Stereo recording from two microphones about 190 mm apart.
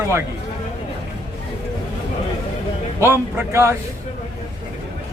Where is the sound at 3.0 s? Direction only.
15° right (ahead or behind).